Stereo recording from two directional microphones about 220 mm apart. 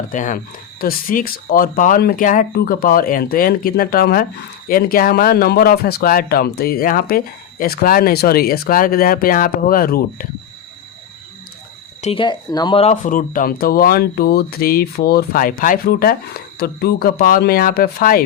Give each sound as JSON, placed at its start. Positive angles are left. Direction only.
{"t": 0.1, "sound": "speech", "side_deg": 35}
{"t": 12.0, "sound": "speech", "side_deg": 20}